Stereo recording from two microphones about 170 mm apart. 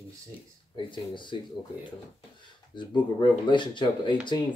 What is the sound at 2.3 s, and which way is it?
Speech, 25° left (ahead or behind).